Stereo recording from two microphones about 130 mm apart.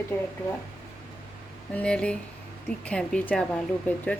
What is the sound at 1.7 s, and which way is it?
Speech, 10° left (ahead or behind).